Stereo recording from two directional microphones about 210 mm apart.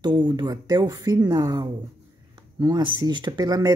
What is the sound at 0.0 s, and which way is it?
Speech, 20° right (ahead or behind).